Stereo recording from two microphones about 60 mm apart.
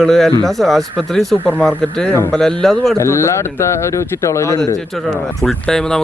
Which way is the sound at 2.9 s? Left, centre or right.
Left.